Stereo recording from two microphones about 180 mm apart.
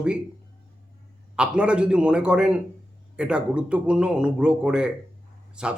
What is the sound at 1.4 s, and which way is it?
Speech, 5° right (ahead or behind).